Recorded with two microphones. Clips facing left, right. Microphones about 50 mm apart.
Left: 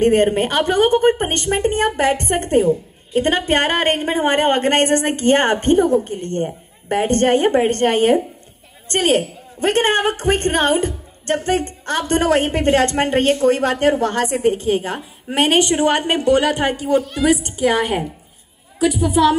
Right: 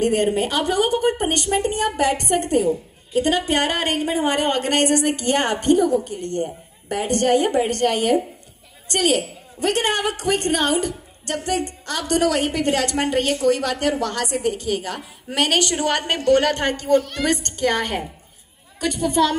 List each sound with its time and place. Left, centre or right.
0.0 s a woman's voice: left; by 19.3 s centre